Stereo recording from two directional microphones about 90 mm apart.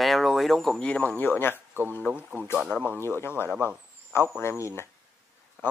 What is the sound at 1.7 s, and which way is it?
Speech, 25° right (ahead or behind).